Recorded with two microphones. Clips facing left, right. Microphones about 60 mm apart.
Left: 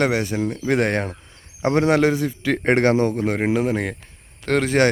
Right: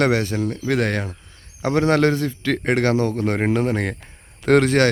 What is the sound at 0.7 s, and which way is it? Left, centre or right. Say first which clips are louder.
A man's voice: left 2 dB; left.